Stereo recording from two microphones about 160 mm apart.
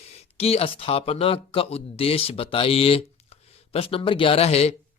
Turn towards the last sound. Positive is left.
turn(degrees=40)  # may be behind; listen again after turning